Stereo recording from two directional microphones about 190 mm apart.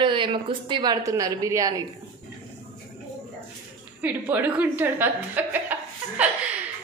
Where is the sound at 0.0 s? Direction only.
25° right (ahead or behind).